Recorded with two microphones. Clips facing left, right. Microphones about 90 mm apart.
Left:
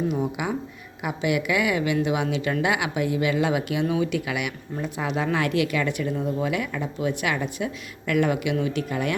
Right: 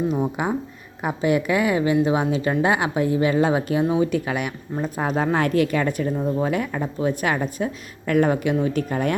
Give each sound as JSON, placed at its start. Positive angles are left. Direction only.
{"t": 0.1, "sound": "a woman's voice", "side_deg": -35}